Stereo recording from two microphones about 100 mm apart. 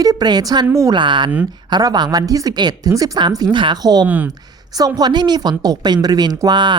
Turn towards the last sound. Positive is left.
turn(degrees=-50)  # may be behind; listen again after turning